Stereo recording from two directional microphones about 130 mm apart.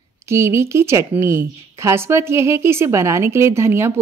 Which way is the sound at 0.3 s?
20° right (ahead or behind).